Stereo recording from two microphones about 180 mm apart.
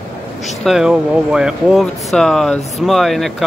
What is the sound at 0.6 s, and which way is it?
Speech, 5° right (ahead or behind).